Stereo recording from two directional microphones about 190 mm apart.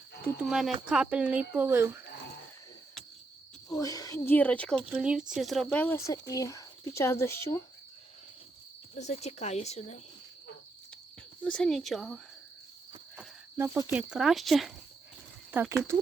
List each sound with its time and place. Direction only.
0.3 s speech: centre (ahead or behind)
3.7 s speech: 20° left (ahead or behind)
4.9 s speech: 5° right (ahead or behind); by 7.6 s 15° left (ahead or behind)
9.0 s speech: 35° left (ahead or behind)
11.4 s speech: 5° left (ahead or behind)
13.1 s speech: 10° right (ahead or behind)